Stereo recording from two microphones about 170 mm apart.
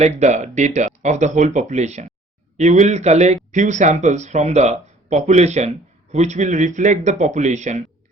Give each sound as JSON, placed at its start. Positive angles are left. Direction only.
{"t": 0.0, "sound": "speech", "side_deg": -45}